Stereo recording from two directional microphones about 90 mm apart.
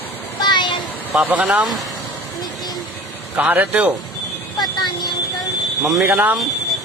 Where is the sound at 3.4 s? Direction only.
20° right (ahead or behind).